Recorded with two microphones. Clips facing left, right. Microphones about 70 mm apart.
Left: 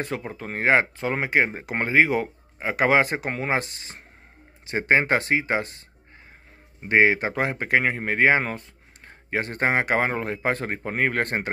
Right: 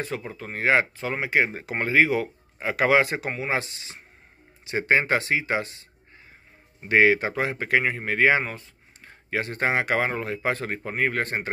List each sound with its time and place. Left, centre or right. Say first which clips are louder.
0.0 s speech: left 2 dB; left
6.9 s speech: even; left
8.5 s a sound: left 4 dB; left
9.3 s speech: left 1 dB; left